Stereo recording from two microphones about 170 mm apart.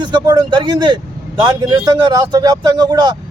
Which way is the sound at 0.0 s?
25° right (ahead or behind).